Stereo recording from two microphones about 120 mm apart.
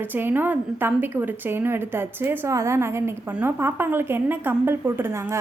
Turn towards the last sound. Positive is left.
turn(degrees=-20)  # may be behind; listen again after turning